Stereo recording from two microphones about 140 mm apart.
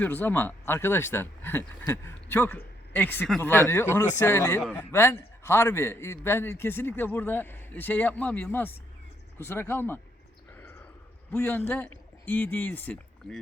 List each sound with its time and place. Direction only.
0.0 s a man's voice: 15° left (ahead or behind)
11.3 s a man's voice: 15° left (ahead or behind)